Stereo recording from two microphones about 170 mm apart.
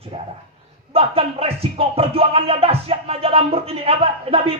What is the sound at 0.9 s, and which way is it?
Music, 35° right (ahead or behind).